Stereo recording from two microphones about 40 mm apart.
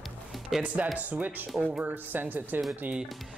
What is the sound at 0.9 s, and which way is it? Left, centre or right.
Speech, right.